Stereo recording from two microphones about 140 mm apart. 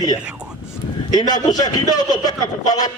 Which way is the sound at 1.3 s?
30° left (ahead or behind).